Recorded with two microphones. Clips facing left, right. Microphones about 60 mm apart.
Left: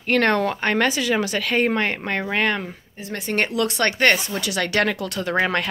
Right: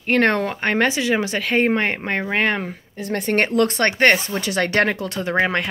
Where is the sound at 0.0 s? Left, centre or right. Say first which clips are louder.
Right 1 dB; right.